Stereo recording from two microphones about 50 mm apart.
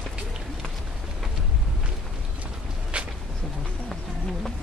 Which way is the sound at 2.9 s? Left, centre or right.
Right.